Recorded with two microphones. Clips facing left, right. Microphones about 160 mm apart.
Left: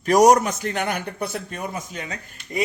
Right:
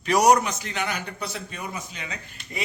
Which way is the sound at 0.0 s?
45° left (ahead or behind).